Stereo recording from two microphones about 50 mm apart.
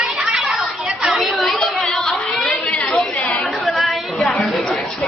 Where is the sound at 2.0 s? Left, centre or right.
Centre.